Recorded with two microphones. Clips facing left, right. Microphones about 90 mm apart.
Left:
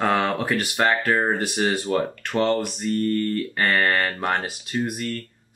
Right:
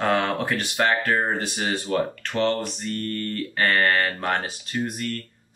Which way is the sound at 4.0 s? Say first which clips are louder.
Left 1 dB; 15° left (ahead or behind).